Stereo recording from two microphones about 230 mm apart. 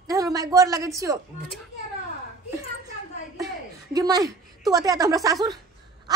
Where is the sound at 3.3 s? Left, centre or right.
Centre.